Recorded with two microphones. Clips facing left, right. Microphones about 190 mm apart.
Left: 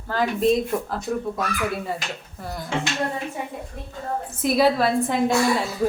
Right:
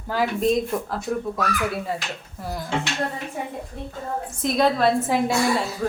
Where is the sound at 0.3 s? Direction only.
Centre (ahead or behind).